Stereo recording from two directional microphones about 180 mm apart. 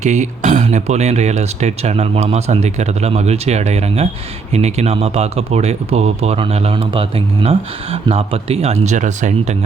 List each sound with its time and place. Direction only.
0.0 s speech: 40° right (ahead or behind)